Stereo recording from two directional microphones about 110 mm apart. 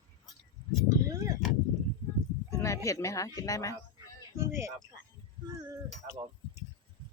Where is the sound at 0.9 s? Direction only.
30° right (ahead or behind).